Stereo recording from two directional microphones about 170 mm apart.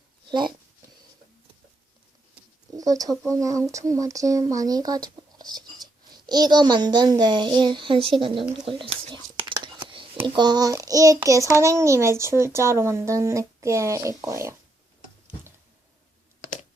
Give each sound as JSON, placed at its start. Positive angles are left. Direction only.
{"t": 0.3, "sound": "speech", "side_deg": -25}
{"t": 2.7, "sound": "speech", "side_deg": -20}
{"t": 8.2, "sound": "a sound", "side_deg": -30}
{"t": 10.2, "sound": "a child's voice", "side_deg": -25}